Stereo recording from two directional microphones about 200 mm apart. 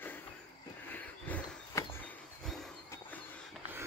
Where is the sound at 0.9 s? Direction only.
10° left (ahead or behind).